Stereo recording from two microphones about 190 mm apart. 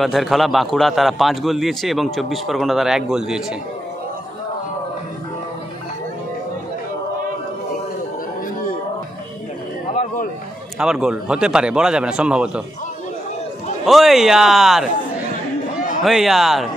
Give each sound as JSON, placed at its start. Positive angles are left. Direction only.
{"t": 0.0, "sound": "a man's voice", "side_deg": 0}
{"t": 9.8, "sound": "a sound", "side_deg": 40}
{"t": 10.8, "sound": "a man's voice", "side_deg": -5}
{"t": 13.8, "sound": "a man's voice", "side_deg": 0}
{"t": 16.0, "sound": "a man's voice", "side_deg": 0}